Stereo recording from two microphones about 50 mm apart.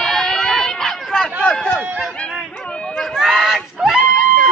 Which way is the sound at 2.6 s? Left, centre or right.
Centre.